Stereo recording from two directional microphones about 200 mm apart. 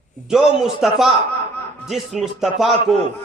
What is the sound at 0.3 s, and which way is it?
Speech, centre (ahead or behind).